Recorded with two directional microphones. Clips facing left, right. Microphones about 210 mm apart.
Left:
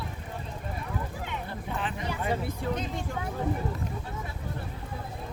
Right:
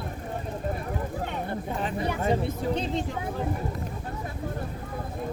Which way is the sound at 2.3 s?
25° right (ahead or behind).